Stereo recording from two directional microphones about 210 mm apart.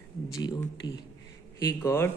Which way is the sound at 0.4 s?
20° left (ahead or behind).